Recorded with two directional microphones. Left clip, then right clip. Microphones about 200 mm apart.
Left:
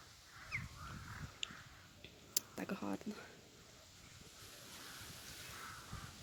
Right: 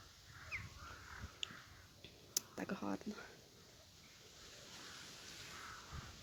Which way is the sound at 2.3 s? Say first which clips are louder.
Left 1 dB; 5° left (ahead or behind).